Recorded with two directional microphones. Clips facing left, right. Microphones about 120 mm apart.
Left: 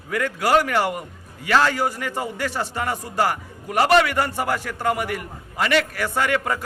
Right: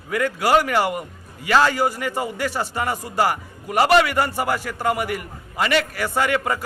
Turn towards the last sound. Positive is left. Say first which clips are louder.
# right 1 dB
turn(degrees=-5)  # may be behind; listen again after turning